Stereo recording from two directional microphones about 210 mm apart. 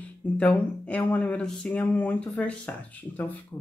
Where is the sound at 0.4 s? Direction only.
5° left (ahead or behind).